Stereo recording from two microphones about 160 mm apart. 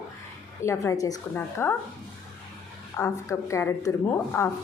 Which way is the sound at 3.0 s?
15° left (ahead or behind).